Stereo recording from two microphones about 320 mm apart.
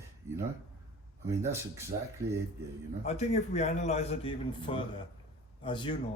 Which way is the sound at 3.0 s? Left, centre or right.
Left.